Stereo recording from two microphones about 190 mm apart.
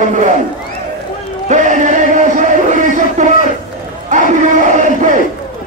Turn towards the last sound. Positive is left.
turn(degrees=-40)  # may be behind; listen again after turning